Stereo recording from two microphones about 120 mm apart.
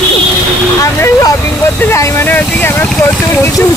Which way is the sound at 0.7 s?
30° left (ahead or behind).